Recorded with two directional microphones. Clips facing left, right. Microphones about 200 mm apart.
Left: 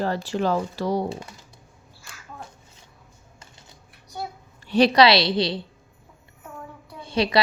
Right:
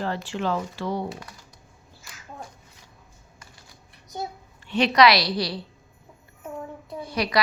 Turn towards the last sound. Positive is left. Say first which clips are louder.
# left 4 dB
turn(degrees=25)  # may be behind; listen again after turning